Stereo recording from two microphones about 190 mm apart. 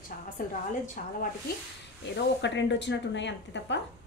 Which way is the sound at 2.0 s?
70° left (ahead or behind).